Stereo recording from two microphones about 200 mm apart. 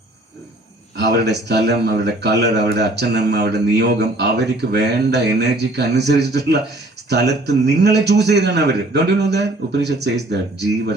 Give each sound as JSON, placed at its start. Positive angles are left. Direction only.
{"t": 0.9, "sound": "a man's voice", "side_deg": -55}